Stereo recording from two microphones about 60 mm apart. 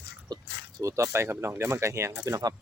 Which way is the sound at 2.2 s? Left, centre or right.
Right.